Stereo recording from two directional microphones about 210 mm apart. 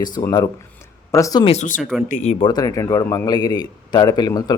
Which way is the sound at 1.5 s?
35° left (ahead or behind).